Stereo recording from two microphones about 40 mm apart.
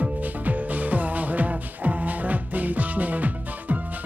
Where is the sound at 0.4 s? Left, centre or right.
Right.